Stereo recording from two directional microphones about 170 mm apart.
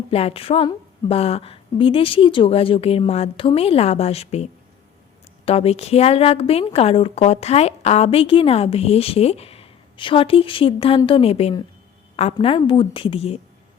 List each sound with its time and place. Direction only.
0.1 s a woman's voice: 35° left (ahead or behind)
5.5 s a woman's voice: 35° left (ahead or behind)